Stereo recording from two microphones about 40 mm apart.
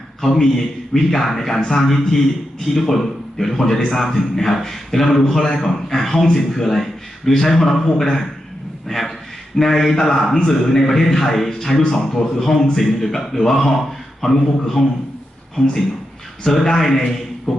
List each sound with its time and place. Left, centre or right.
0.2 s a man's voice: centre
16.6 s a man's voice: centre
17.5 s music: centre